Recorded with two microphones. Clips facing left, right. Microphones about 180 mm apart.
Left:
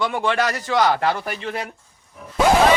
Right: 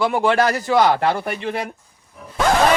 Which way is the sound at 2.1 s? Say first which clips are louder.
Left 2 dB; 5° left (ahead or behind).